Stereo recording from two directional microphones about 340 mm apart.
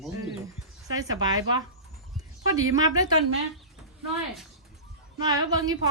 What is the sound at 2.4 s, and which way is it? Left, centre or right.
Speech, right.